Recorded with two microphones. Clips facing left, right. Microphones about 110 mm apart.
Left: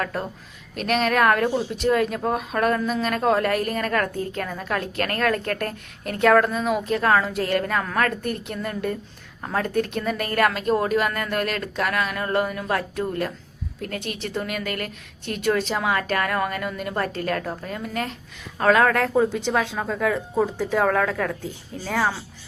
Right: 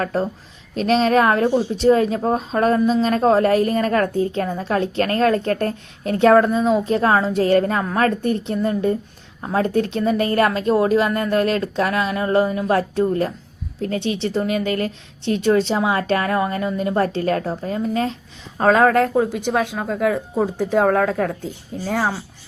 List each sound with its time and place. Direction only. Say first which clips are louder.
0.0 s speech: right 6 dB; 30° right (ahead or behind)
13.9 s speech: right 9 dB; 50° left (ahead or behind)
14.3 s speech: right 6 dB; 30° right (ahead or behind)
19.1 s speech: right 2 dB; 10° right (ahead or behind)